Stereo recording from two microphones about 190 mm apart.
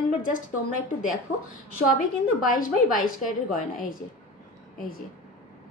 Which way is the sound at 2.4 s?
45° left (ahead or behind).